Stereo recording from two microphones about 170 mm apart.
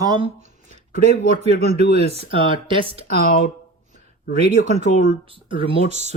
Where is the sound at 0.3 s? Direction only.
40° right (ahead or behind).